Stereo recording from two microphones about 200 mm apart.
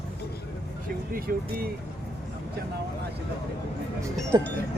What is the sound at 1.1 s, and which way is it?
Speech, 45° right (ahead or behind).